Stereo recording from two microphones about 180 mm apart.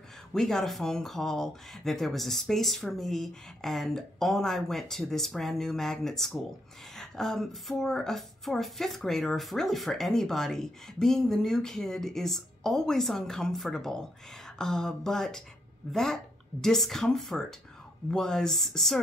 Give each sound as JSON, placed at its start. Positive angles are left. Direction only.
{"t": 0.3, "sound": "a woman's voice", "side_deg": 5}